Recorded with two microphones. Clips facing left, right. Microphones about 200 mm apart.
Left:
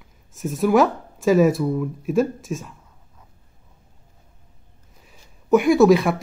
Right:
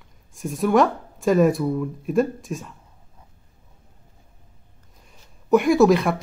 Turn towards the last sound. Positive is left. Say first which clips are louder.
# left 2 dB
turn(degrees=0)  # may be behind; listen again after turning